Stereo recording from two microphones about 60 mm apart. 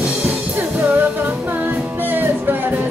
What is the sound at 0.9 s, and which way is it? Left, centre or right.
Music, right.